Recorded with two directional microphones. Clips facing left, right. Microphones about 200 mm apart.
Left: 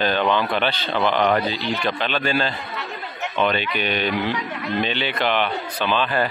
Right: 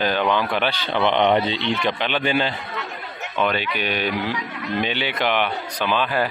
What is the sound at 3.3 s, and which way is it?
Speech, 5° right (ahead or behind).